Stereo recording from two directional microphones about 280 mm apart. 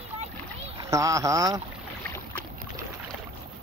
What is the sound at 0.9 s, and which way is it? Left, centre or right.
Speech, centre.